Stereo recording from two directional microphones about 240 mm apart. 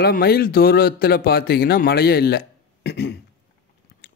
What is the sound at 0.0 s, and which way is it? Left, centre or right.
Speech, left.